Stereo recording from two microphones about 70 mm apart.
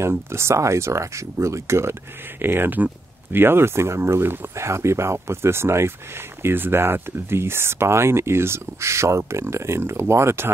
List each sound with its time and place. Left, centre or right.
0.0 s speech: right